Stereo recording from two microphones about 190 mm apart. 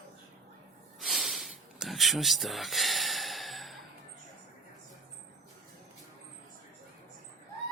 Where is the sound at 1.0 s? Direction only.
Centre (ahead or behind).